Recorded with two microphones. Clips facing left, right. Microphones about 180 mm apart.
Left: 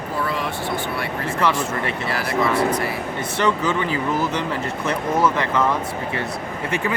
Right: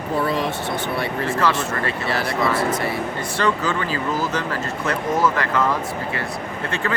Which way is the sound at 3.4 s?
20° left (ahead or behind).